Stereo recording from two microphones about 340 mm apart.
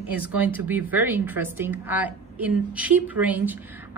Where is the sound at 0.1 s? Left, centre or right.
Centre.